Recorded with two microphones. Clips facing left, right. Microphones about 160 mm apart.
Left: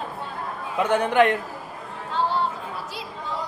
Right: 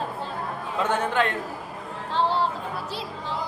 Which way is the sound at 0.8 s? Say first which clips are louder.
Left 5 dB; 15° left (ahead or behind).